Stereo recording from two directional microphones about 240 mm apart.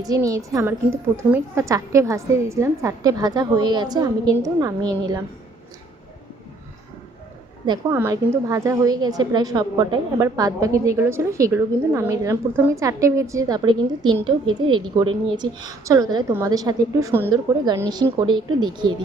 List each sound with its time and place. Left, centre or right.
0.0 s a woman's voice: centre
7.7 s a woman's voice: centre